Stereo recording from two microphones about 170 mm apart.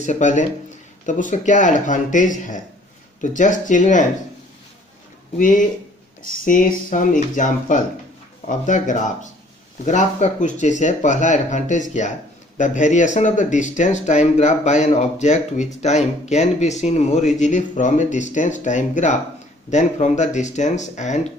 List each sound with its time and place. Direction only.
0.0 s speech: 45° left (ahead or behind)
5.4 s speech: 50° left (ahead or behind)